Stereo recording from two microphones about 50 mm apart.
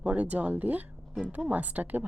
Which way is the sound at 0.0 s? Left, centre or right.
Right.